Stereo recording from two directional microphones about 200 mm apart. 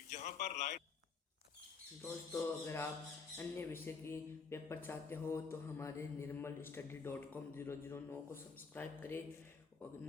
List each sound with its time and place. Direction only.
0.1 s a man's voice: 35° left (ahead or behind)
2.0 s speech: 15° left (ahead or behind)